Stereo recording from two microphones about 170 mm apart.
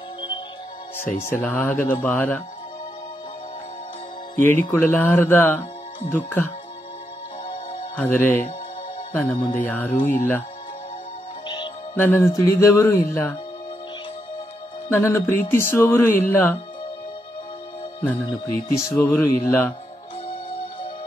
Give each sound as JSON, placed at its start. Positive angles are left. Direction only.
{"t": 1.3, "sound": "speech", "side_deg": 10}
{"t": 4.4, "sound": "speech", "side_deg": 10}
{"t": 7.9, "sound": "speech", "side_deg": 10}
{"t": 11.4, "sound": "music", "side_deg": 25}
{"t": 11.9, "sound": "speech", "side_deg": 15}
{"t": 14.9, "sound": "speech", "side_deg": 15}
{"t": 18.3, "sound": "speech", "side_deg": 15}